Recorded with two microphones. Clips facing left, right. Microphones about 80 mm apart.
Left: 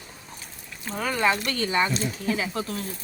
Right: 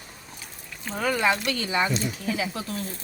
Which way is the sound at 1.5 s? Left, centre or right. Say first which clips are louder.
Left 1 dB; left.